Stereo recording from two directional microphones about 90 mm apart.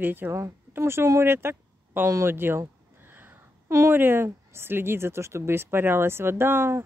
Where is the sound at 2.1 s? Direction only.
25° right (ahead or behind).